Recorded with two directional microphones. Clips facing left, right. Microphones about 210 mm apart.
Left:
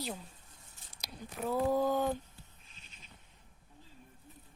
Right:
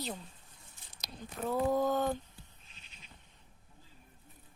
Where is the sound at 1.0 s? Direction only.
10° left (ahead or behind).